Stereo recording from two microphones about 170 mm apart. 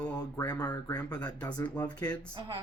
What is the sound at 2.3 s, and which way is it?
Speech, 30° right (ahead or behind).